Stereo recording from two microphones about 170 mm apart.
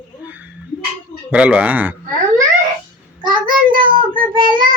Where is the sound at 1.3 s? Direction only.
5° right (ahead or behind).